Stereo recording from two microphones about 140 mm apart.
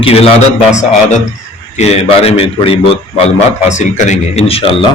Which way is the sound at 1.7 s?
50° left (ahead or behind).